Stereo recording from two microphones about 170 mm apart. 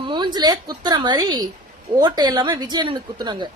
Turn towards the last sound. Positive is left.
turn(degrees=-25)  # may be behind; listen again after turning